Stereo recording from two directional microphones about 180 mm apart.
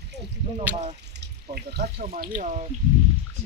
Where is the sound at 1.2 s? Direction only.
65° right (ahead or behind).